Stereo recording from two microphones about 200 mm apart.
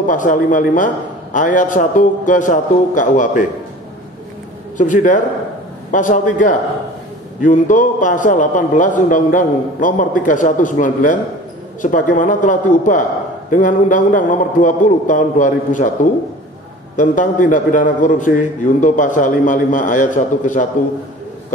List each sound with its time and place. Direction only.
0.1 s a man's voice: 40° left (ahead or behind)
4.7 s a man's voice: 40° left (ahead or behind)